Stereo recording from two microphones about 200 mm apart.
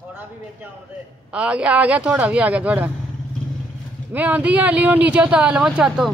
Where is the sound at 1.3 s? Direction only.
5° right (ahead or behind).